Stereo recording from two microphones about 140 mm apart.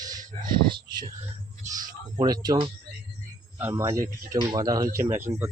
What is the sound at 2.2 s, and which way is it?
Speech, 30° right (ahead or behind).